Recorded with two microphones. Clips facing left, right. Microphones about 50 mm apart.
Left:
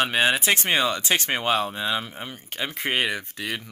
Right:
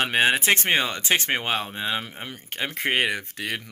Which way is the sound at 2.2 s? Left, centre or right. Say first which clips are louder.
Even; right.